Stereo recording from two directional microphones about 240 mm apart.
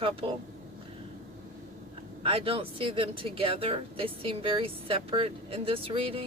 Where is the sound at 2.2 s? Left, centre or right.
Right.